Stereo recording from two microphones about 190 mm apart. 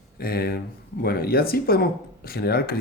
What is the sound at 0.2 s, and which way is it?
Speech, 50° left (ahead or behind).